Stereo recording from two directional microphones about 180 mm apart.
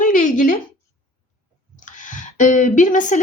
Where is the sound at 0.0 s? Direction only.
45° left (ahead or behind).